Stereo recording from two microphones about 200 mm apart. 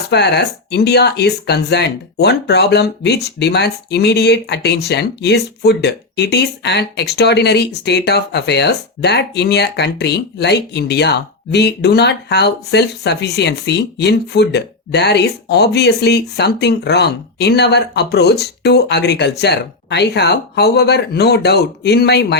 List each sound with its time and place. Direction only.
0.1 s speech: 55° left (ahead or behind)